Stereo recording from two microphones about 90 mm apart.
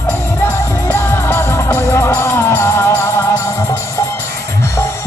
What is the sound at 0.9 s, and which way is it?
Music, 25° left (ahead or behind).